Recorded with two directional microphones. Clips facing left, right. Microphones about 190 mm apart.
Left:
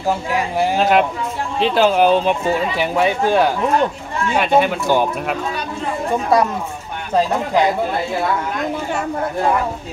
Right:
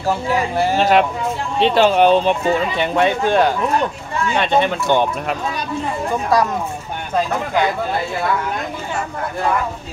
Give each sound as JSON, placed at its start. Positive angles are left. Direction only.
{"t": 0.7, "sound": "speech", "side_deg": 0}
{"t": 6.3, "sound": "speech", "side_deg": 25}